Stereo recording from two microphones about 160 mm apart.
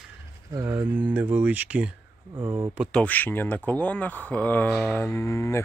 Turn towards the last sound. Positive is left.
turn(degrees=15)  # may be behind; listen again after turning